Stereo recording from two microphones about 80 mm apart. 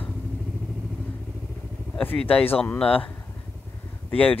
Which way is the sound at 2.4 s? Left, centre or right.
Left.